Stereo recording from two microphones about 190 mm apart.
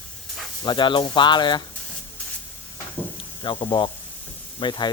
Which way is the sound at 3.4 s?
25° left (ahead or behind).